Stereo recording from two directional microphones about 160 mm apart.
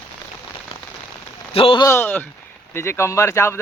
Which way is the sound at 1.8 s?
15° left (ahead or behind).